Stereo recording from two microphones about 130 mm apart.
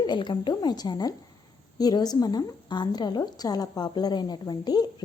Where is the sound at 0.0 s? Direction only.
35° left (ahead or behind).